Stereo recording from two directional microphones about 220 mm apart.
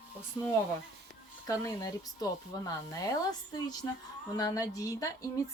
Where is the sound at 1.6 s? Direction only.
15° left (ahead or behind).